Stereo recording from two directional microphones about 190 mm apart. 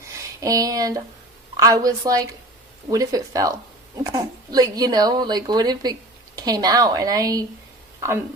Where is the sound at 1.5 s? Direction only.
20° right (ahead or behind).